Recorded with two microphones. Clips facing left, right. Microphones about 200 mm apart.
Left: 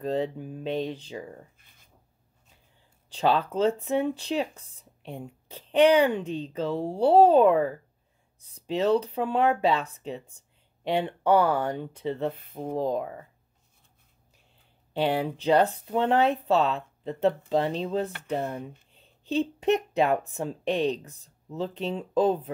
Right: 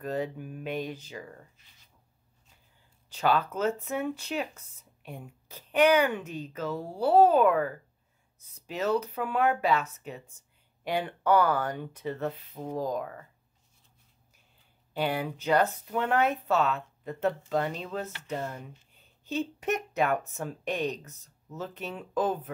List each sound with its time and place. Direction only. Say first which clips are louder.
0.0 s speech: left 4 dB; 25° left (ahead or behind)
1.6 s writing: left 2 dB; 55° left (ahead or behind)
3.1 s speech: left 2 dB; 30° left (ahead or behind)
12.4 s speech: left 4 dB; 50° left (ahead or behind)
12.7 s speech: left 4 dB; 25° left (ahead or behind)
15.0 s speech: left 4 dB; 30° left (ahead or behind)
18.4 s speech: left 5 dB; 60° left (ahead or behind)
18.9 s a woman's voice: left 5 dB; 30° left (ahead or behind)